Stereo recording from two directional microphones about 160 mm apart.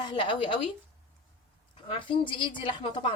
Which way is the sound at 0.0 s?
30° left (ahead or behind).